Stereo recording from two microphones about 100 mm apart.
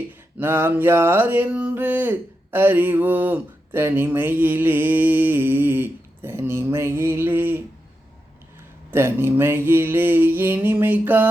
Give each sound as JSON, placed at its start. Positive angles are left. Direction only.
{"t": 0.3, "sound": "speech", "side_deg": -20}
{"t": 8.9, "sound": "speech", "side_deg": -25}